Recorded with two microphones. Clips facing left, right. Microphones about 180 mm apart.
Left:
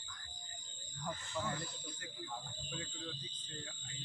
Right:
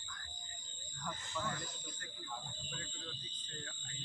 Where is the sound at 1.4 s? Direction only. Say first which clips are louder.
Left 1 dB; 20° left (ahead or behind).